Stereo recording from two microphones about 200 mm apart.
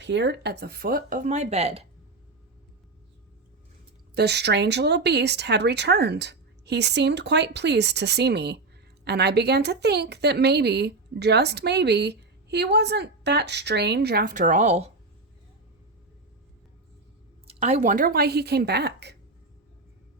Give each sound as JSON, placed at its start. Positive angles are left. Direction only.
{"t": 0.0, "sound": "speech", "side_deg": -60}
{"t": 4.1, "sound": "a woman's voice", "side_deg": -55}
{"t": 17.4, "sound": "speech", "side_deg": -30}